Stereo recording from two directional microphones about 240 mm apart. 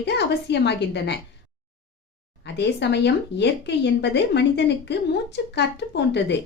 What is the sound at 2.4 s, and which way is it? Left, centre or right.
Speech, left.